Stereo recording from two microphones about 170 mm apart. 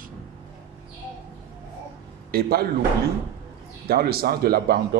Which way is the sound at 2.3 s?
65° right (ahead or behind).